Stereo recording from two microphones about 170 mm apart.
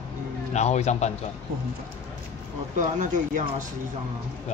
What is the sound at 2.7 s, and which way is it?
Speech, 50° right (ahead or behind).